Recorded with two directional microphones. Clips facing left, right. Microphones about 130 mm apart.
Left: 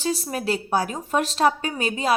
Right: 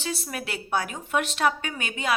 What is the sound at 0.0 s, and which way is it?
Speech, 35° left (ahead or behind).